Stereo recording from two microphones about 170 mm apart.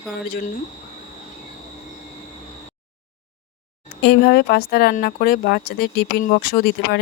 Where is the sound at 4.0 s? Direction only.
75° left (ahead or behind).